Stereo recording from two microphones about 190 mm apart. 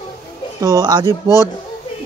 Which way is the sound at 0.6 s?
20° right (ahead or behind).